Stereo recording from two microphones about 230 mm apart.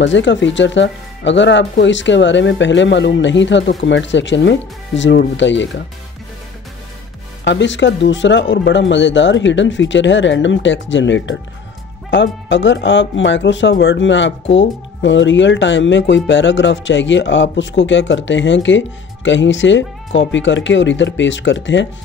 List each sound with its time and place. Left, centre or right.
0.0 s speech: left
7.4 s speech: left